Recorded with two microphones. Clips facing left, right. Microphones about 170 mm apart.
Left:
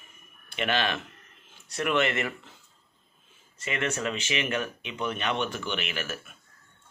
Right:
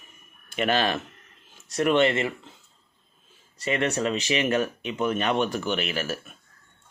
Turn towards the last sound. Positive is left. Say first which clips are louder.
# right 5 dB
turn(degrees=-35)  # may be behind; listen again after turning